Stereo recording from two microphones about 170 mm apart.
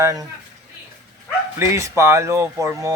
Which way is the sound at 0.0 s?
20° right (ahead or behind).